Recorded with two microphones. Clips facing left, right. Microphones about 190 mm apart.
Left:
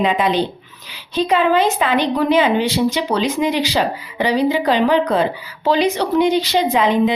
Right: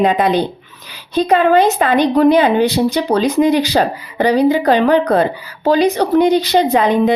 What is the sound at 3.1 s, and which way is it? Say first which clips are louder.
Speech: right 6 dB; 35° right (ahead or behind).